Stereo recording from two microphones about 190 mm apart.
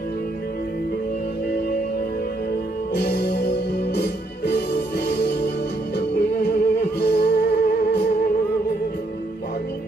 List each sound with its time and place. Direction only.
2.9 s music: 60° left (ahead or behind)